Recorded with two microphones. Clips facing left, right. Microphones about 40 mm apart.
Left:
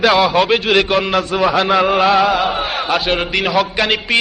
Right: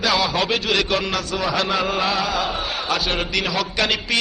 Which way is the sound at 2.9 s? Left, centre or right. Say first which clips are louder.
Left 5 dB; centre.